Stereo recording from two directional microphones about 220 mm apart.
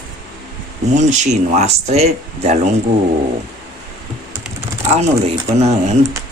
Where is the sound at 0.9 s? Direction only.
30° right (ahead or behind).